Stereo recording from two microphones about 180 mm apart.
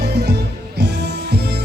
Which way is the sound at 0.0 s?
65° right (ahead or behind).